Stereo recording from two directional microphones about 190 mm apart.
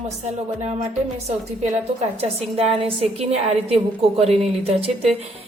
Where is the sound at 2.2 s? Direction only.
30° right (ahead or behind).